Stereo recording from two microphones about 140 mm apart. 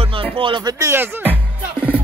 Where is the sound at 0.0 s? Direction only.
40° right (ahead or behind).